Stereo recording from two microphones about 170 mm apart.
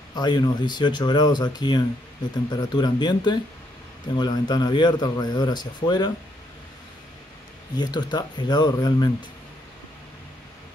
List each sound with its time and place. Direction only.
0.1 s a man's voice: 25° left (ahead or behind)
7.7 s a man's voice: 25° left (ahead or behind)